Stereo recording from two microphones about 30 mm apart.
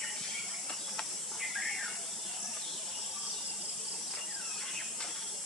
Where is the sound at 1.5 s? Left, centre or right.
Centre.